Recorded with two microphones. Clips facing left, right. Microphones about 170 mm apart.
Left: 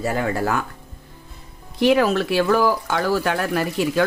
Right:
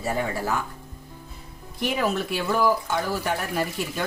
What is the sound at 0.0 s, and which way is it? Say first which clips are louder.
Speech: left 5 dB; 75° left (ahead or behind).